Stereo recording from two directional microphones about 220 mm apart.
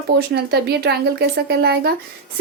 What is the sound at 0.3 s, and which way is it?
A woman's voice, 45° right (ahead or behind).